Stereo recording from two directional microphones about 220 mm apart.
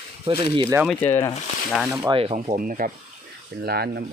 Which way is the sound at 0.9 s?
10° left (ahead or behind).